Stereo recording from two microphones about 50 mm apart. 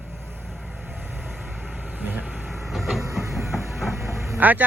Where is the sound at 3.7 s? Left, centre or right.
Centre.